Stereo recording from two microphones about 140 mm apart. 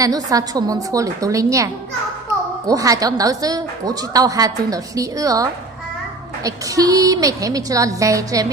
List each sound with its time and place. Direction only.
0.0 s a woman's voice: 25° right (ahead or behind)